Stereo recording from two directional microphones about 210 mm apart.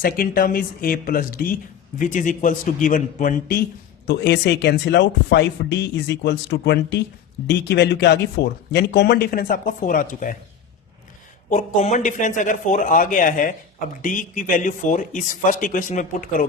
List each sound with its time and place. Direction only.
0.0 s speech: 45° left (ahead or behind)
4.0 s speech: 55° left (ahead or behind)
11.4 s speech: 35° left (ahead or behind)